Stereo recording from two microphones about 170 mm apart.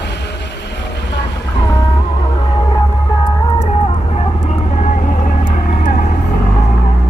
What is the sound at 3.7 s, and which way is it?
Vehicle, 35° left (ahead or behind).